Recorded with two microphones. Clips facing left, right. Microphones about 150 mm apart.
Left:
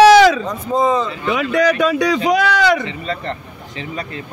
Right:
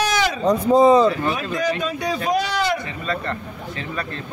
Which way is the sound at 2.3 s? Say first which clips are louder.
Left 5 dB; 80° left.